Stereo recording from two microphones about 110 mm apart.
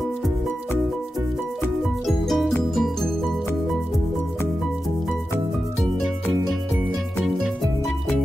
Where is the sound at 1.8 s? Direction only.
Centre (ahead or behind).